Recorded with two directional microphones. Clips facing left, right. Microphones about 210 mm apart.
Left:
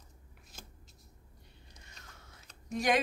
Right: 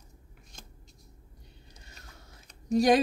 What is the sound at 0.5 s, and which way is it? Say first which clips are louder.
Shuffling cards: even; 5° left (ahead or behind).